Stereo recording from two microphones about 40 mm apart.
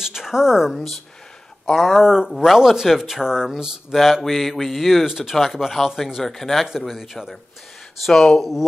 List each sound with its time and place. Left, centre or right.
0.0 s a woman's voice: centre
1.8 s speech: centre
4.0 s speech: centre
6.2 s speech: centre
8.1 s speech: centre
8.4 s speech: centre